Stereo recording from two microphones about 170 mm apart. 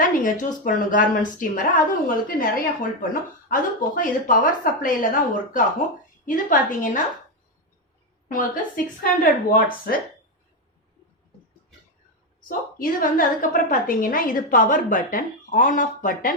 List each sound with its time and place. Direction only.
0.0 s a woman's voice: 50° left (ahead or behind)
8.3 s a woman's voice: 55° left (ahead or behind)
12.5 s a woman's voice: 55° left (ahead or behind)